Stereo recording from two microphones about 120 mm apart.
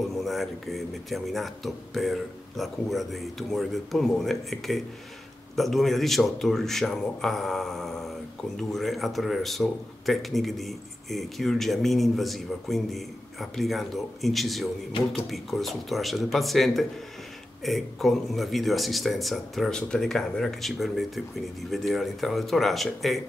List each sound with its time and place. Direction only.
0.1 s speech: centre (ahead or behind)